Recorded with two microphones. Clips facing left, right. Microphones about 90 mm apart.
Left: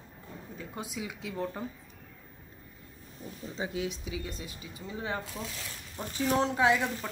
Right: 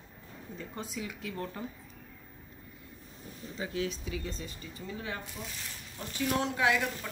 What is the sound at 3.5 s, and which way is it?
Speech, 20° left (ahead or behind).